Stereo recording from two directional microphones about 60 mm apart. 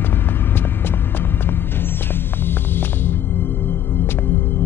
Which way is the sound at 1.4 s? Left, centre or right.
Left.